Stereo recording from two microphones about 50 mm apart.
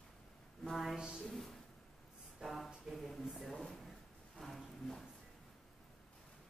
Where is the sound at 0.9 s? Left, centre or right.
Centre.